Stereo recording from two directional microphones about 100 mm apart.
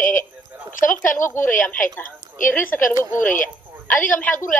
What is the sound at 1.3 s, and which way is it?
Speech, 20° left (ahead or behind).